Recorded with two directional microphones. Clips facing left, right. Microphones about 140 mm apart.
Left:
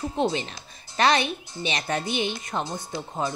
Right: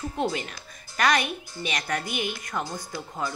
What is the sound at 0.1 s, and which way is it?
Speech, 25° left (ahead or behind).